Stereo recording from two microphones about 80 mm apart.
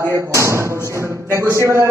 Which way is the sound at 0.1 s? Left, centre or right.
Right.